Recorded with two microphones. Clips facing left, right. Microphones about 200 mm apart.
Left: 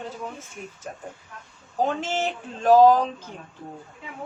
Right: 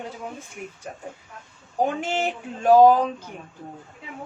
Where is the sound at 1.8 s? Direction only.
10° right (ahead or behind).